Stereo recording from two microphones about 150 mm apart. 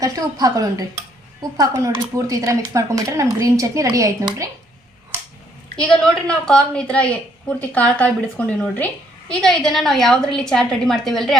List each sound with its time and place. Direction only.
0.0 s speech: 25° right (ahead or behind)
5.7 s a woman's voice: 5° left (ahead or behind)